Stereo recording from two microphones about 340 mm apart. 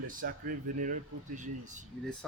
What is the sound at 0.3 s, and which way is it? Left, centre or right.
A man's voice, right.